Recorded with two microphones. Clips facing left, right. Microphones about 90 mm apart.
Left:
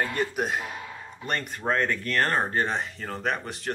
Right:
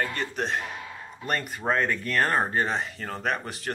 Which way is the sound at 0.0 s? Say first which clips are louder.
Left 2 dB; 10° left (ahead or behind).